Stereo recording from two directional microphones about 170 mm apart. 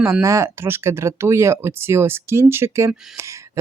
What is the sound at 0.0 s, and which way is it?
Speech, 15° right (ahead or behind).